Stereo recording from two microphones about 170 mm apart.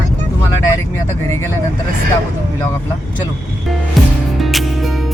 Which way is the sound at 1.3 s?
15° left (ahead or behind).